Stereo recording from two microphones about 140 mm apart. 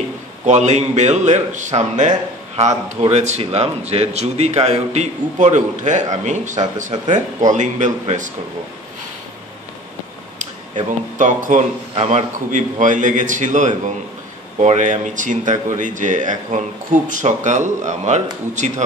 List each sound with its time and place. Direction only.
0.5 s a man's voice: 55° right (ahead or behind)
10.9 s speech: 65° right (ahead or behind)
11.9 s a man's voice: 45° right (ahead or behind)
12.4 s speech: 65° right (ahead or behind)